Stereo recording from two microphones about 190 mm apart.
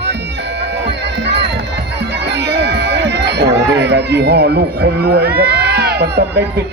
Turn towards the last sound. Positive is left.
turn(degrees=-60)  # may be behind; listen again after turning